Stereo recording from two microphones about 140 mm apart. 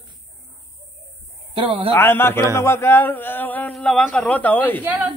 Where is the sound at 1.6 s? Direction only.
40° right (ahead or behind).